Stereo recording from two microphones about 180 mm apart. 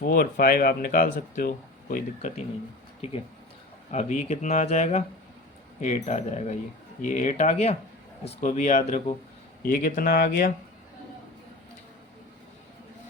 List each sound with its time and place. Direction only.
0.0 s speech: 55° left (ahead or behind)
3.0 s speech: 35° left (ahead or behind)
9.6 s speech: 50° left (ahead or behind)